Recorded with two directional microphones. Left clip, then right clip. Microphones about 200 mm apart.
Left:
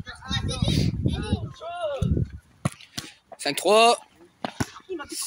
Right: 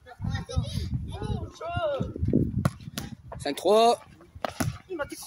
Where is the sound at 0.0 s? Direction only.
55° right (ahead or behind).